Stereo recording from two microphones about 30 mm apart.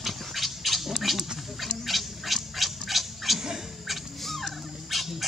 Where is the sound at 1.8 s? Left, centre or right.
Centre.